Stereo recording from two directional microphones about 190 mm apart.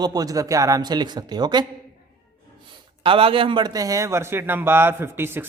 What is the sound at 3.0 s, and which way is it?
A man's voice, 30° right (ahead or behind).